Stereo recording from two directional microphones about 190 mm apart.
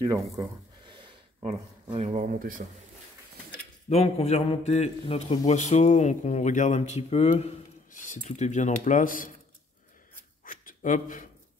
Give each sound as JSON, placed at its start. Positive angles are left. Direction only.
{"t": 0.0, "sound": "speech", "side_deg": -20}
{"t": 3.9, "sound": "speech", "side_deg": 30}
{"t": 10.4, "sound": "a sound", "side_deg": 45}